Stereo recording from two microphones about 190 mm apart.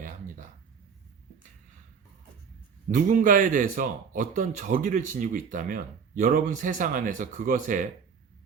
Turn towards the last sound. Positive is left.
turn(degrees=-45)  # may be behind; listen again after turning